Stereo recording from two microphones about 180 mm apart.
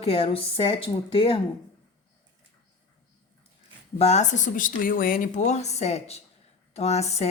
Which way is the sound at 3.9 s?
40° left (ahead or behind).